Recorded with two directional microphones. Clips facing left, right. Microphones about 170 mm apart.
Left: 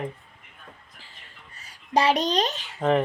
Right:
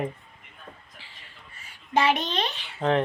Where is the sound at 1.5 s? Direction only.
40° left (ahead or behind).